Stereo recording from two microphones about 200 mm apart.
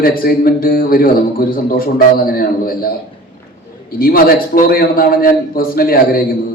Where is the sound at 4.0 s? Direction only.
45° left (ahead or behind).